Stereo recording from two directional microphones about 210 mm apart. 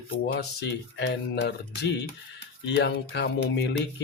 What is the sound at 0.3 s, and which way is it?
Speech, 55° left (ahead or behind).